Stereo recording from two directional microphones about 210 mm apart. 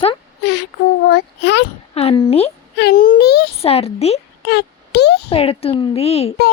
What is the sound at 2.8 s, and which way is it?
Child singing, 45° left (ahead or behind).